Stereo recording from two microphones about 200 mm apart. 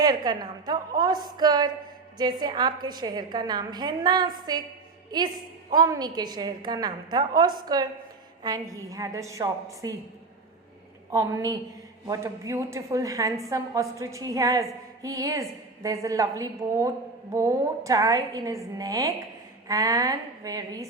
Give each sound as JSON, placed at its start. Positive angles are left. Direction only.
{"t": 0.0, "sound": "a woman's voice", "side_deg": -20}
{"t": 11.1, "sound": "a woman's voice", "side_deg": -15}